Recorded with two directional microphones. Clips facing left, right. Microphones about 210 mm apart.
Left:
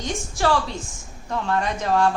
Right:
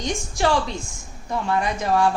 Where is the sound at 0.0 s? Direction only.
15° right (ahead or behind).